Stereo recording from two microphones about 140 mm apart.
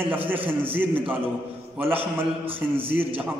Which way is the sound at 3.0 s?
40° right (ahead or behind).